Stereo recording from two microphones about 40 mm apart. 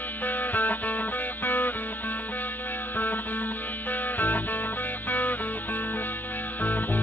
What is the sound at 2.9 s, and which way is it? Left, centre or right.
Music, left.